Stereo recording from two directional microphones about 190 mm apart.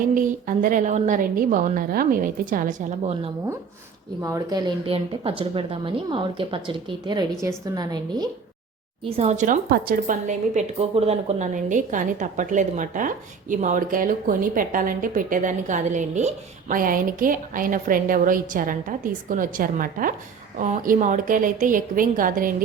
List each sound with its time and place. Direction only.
0.1 s a woman's voice: 45° right (ahead or behind)
4.2 s speech: 15° right (ahead or behind)
9.0 s a woman's voice: 35° right (ahead or behind)